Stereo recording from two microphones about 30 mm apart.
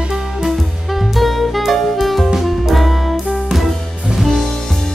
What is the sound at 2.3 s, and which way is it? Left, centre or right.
Music, centre.